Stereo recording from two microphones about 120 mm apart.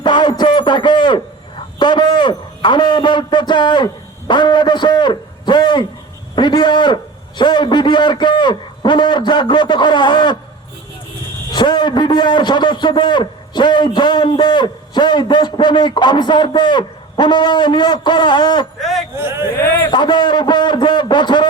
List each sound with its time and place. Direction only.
0.0 s a sound: 40° left (ahead or behind)
4.3 s a man's voice: 40° left (ahead or behind)
11.5 s a man's voice: 35° left (ahead or behind)
18.8 s a sound: centre (ahead or behind)
19.1 s speech: 20° right (ahead or behind)
19.9 s a man's voice: 40° left (ahead or behind)